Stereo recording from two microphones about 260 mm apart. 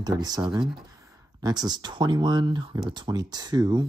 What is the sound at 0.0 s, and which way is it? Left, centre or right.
Speech, centre.